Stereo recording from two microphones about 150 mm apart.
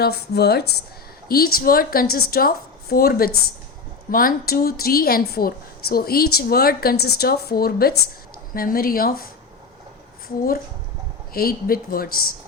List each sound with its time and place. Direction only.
0.0 s a woman's voice: 90° left
1.3 s speech: 80° left
4.1 s a woman's voice: 70° left (ahead or behind); by 7.9 s 90° left
8.5 s speech: 75° left (ahead or behind)
11.3 s speech: 85° left